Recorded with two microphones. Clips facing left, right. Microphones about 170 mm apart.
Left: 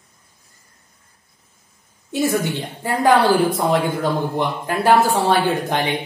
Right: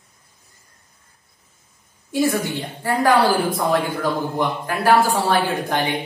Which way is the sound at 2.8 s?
20° left (ahead or behind).